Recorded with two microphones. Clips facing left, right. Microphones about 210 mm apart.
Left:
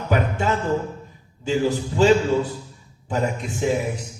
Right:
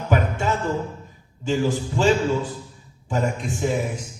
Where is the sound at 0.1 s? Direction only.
45° right (ahead or behind).